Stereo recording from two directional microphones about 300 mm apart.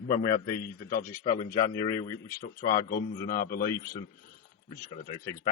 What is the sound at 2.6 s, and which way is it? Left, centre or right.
A man's voice, left.